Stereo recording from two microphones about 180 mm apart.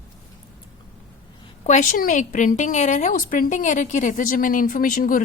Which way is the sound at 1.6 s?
45° left (ahead or behind).